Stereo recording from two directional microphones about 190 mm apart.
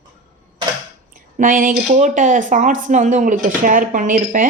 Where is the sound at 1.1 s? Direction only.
45° right (ahead or behind).